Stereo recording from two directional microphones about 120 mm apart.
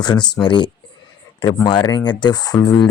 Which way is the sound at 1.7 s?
40° left (ahead or behind).